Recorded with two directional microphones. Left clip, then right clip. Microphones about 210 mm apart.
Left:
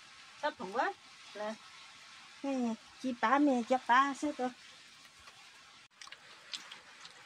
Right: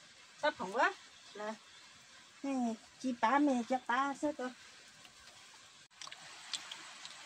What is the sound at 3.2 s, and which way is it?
Speech, 25° left (ahead or behind).